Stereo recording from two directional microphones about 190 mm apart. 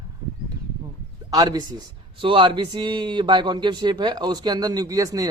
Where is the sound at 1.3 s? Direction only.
20° right (ahead or behind).